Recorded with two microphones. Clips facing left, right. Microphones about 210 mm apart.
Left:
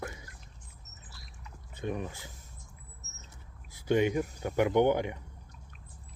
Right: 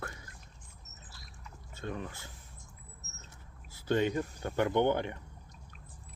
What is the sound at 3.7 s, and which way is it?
Speech, 15° left (ahead or behind).